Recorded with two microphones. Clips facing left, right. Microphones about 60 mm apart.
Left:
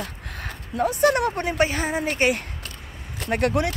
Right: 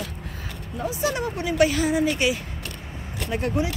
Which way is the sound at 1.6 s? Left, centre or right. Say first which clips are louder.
Right 6 dB; left.